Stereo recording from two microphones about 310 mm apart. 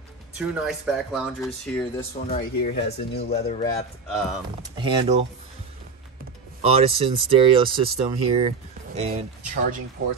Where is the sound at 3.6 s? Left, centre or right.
Centre.